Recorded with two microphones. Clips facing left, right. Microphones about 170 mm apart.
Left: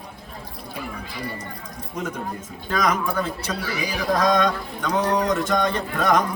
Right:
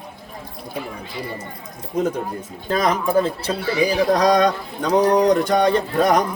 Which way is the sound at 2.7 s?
30° right (ahead or behind).